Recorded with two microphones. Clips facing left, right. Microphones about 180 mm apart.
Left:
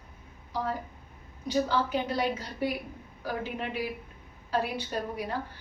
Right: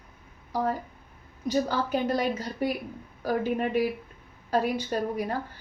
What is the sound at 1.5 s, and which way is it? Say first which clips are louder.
A woman's voice: right 1 dB; 45° right (ahead or behind).